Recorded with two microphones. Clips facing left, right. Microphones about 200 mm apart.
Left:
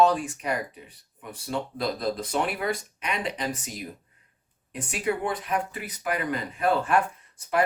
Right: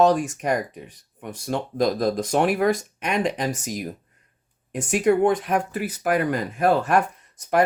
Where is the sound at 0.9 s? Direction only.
75° right (ahead or behind).